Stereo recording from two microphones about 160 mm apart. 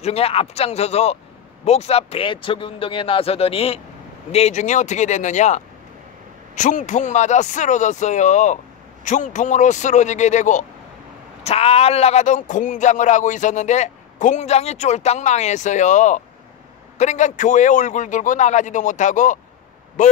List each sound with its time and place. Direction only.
0.0 s speech: 40° left (ahead or behind)